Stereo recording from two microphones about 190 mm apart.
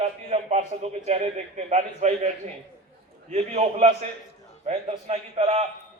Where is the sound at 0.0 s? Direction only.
35° right (ahead or behind).